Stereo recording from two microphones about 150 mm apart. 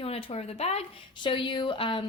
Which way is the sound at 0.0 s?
40° left (ahead or behind).